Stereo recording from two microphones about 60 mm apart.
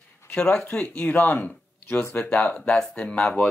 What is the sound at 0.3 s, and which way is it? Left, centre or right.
Speech, centre.